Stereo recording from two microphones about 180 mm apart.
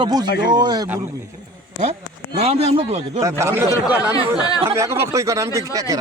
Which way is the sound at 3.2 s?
15° right (ahead or behind).